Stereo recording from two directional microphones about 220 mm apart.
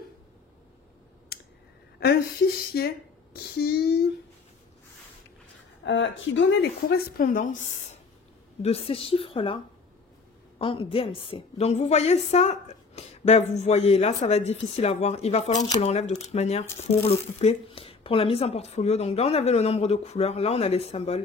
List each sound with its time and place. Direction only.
1.3 s a sound: 45° left (ahead or behind)
2.7 s speech: 45° left (ahead or behind)
5.9 s a woman's voice: 55° left (ahead or behind); by 9.6 s 25° left (ahead or behind)
10.6 s a woman's voice: 25° left (ahead or behind)